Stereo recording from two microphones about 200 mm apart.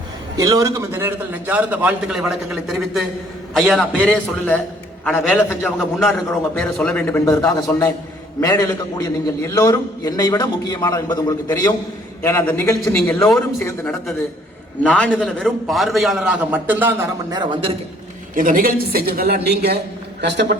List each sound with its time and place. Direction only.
0.3 s a man's voice: 15° right (ahead or behind); by 13.4 s 5° left (ahead or behind)
14.8 s a man's voice: 5° left (ahead or behind)
17.3 s a man's voice: 25° right (ahead or behind)
18.3 s a woman's voice: 45° right (ahead or behind)